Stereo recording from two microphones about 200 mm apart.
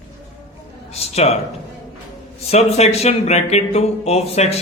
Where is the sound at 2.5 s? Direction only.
30° left (ahead or behind).